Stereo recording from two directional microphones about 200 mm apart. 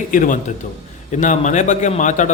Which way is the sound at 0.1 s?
40° left (ahead or behind).